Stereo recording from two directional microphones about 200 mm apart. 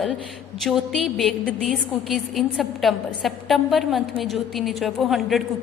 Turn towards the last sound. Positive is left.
turn(degrees=0)  # may be behind; listen again after turning